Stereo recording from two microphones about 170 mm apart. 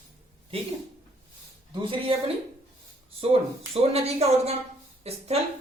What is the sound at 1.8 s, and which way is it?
Speech, 30° right (ahead or behind).